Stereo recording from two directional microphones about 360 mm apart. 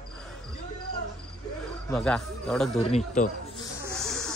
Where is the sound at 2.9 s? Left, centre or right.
Centre.